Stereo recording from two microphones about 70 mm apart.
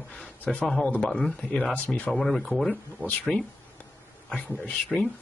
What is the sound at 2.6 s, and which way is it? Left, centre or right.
Speech, left.